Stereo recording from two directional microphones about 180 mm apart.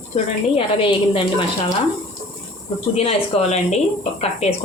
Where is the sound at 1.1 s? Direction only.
30° left (ahead or behind).